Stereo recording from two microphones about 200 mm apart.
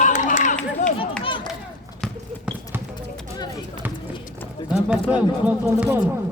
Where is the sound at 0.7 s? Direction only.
30° left (ahead or behind).